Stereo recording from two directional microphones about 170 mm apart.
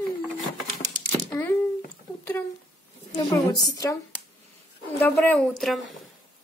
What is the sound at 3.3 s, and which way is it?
A woman's voice, 20° left (ahead or behind).